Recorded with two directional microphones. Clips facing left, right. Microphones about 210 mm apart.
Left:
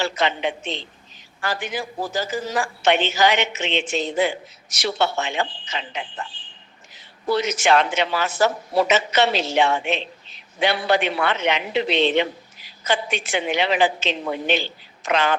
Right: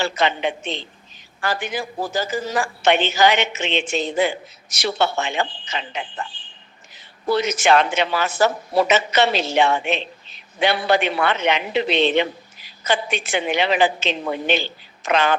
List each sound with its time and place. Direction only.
0.0 s a woman's voice: 55° right (ahead or behind)